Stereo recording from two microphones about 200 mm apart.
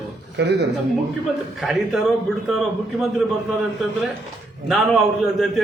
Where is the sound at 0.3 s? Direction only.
60° right (ahead or behind).